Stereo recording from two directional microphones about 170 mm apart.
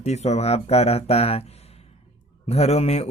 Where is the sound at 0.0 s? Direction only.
40° left (ahead or behind).